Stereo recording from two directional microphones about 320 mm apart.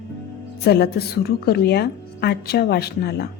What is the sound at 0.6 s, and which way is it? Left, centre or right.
A woman's voice, left.